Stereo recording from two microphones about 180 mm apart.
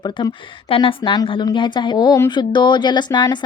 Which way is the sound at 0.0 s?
25° left (ahead or behind).